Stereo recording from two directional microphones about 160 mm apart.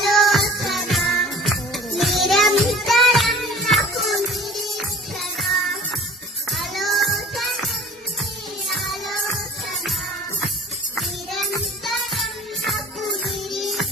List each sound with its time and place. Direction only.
0.0 s music: centre (ahead or behind)
5.4 s music: centre (ahead or behind)
8.7 s music: centre (ahead or behind)
10.9 s music: centre (ahead or behind)